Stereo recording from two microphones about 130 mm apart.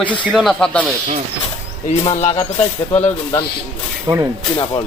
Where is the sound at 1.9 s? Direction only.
60° left (ahead or behind).